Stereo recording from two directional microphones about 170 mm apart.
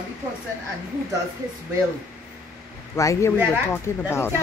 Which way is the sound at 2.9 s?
15° left (ahead or behind).